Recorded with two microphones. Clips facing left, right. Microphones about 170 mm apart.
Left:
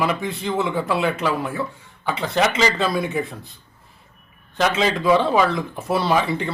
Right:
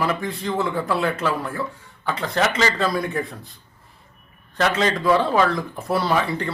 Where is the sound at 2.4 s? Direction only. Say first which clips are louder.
Left 2 dB; 15° left (ahead or behind).